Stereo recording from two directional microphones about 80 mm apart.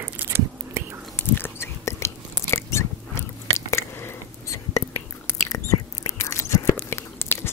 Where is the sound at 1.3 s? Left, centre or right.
Left.